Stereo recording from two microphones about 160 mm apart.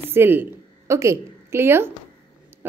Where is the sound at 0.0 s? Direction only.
15° right (ahead or behind).